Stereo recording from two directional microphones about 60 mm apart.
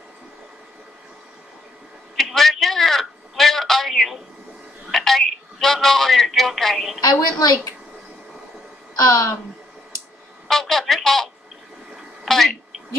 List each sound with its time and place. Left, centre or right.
2.1 s a sound: centre
4.9 s telephone: centre
7.0 s a woman's voice: left
8.9 s a woman's voice: left
10.5 s telephone: centre
12.3 s a sound: centre